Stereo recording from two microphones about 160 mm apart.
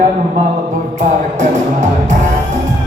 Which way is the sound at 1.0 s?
50° right (ahead or behind).